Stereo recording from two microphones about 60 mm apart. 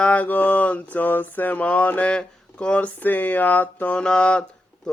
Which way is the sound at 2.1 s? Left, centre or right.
Centre.